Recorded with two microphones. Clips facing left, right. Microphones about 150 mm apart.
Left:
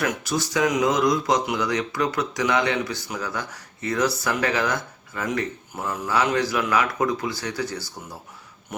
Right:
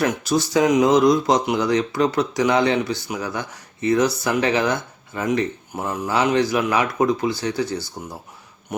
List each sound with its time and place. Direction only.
0.0 s speech: 25° right (ahead or behind)